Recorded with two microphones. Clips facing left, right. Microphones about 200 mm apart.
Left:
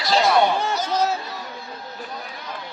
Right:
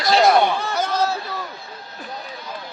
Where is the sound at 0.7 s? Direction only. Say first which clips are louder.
Right 1 dB; 55° right (ahead or behind).